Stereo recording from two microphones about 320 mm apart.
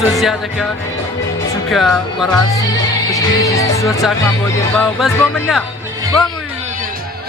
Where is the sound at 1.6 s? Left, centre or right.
Centre.